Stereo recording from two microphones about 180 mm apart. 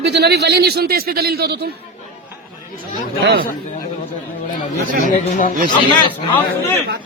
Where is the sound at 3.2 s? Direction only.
65° right (ahead or behind).